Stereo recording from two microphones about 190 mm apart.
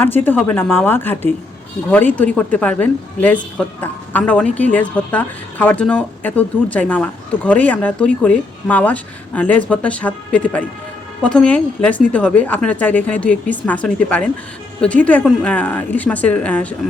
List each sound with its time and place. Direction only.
0.0 s a woman's voice: 10° left (ahead or behind)